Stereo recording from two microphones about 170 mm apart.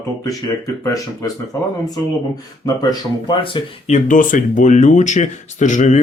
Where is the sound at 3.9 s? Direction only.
50° left (ahead or behind).